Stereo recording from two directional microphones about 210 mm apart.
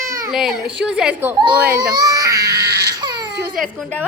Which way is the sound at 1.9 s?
15° right (ahead or behind).